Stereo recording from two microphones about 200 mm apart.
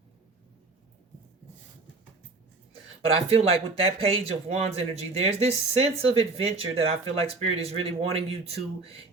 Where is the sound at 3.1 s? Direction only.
30° right (ahead or behind).